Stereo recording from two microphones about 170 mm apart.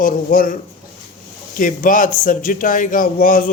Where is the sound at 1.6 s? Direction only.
50° left (ahead or behind).